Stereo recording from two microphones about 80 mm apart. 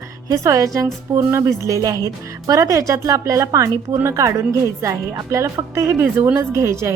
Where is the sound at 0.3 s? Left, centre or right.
Right.